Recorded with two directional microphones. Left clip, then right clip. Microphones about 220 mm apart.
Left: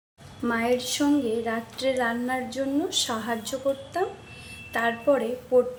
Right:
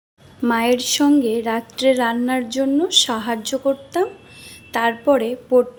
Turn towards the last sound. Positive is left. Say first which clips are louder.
# right 6 dB
turn(degrees=-35)  # may be behind; listen again after turning